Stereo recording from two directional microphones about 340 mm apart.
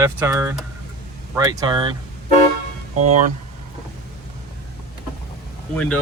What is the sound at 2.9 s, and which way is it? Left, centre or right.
Speech, right.